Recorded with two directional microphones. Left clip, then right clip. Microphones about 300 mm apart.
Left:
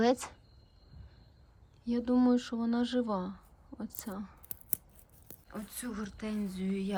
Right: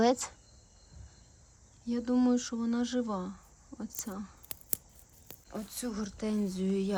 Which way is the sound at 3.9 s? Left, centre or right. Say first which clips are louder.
Right 2 dB; centre.